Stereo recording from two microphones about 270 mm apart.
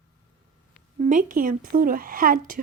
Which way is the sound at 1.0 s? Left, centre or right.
Right.